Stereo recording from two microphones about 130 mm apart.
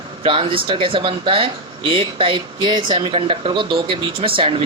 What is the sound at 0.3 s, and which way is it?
Speech, 45° right (ahead or behind).